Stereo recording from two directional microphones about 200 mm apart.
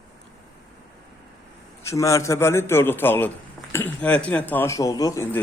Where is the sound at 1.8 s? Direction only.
15° left (ahead or behind).